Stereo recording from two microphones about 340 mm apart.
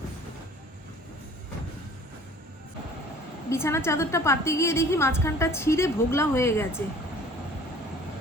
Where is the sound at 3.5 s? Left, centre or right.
Centre.